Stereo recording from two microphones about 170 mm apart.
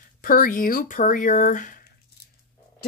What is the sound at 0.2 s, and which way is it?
Speech, 55° left (ahead or behind).